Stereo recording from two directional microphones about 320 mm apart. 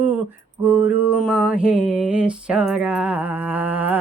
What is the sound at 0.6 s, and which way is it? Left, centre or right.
Mantra, centre.